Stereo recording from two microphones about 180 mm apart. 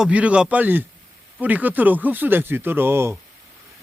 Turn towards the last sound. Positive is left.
turn(degrees=-15)  # may be behind; listen again after turning